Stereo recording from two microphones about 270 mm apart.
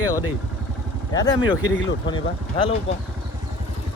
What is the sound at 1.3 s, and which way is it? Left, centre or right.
Speech, left.